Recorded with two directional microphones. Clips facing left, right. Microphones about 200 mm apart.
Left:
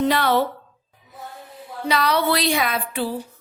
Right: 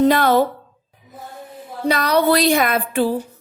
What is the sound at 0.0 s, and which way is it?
Speech, 45° right (ahead or behind).